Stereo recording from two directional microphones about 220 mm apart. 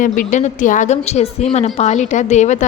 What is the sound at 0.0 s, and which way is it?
A woman's voice, 35° left (ahead or behind).